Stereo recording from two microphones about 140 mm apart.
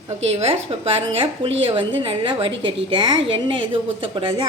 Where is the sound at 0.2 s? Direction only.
50° right (ahead or behind).